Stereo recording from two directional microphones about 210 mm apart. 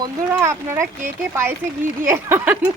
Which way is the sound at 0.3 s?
10° right (ahead or behind).